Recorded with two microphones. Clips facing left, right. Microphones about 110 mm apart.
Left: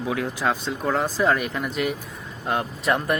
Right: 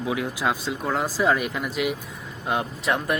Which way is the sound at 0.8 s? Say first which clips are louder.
Left 1 dB; centre (ahead or behind).